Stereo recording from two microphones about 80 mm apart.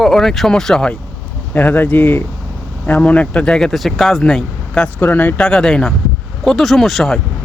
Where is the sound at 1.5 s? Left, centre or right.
Left.